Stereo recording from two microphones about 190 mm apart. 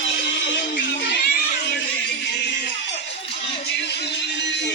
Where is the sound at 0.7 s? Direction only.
50° left (ahead or behind).